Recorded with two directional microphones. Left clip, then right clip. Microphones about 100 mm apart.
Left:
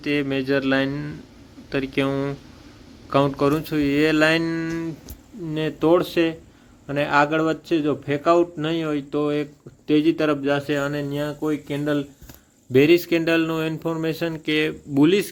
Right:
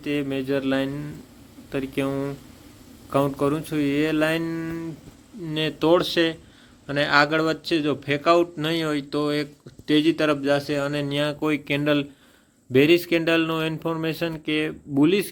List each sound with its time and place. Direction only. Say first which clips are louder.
0.0 s a man's voice: left 3 dB; 5° right (ahead or behind)
9.8 s a man's voice: left 1 dB; 15° right (ahead or behind)
11.2 s speech: right 3 dB; 40° right (ahead or behind)
12.7 s a man's voice: left 2 dB; centre (ahead or behind)